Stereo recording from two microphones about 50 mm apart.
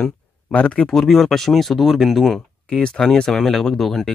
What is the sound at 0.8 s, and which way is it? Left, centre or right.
Speech, centre.